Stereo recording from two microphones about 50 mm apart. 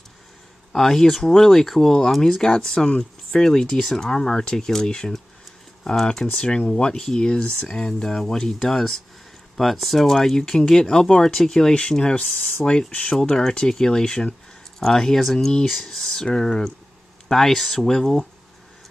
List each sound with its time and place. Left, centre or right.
0.7 s speech: centre
6.3 s speech: centre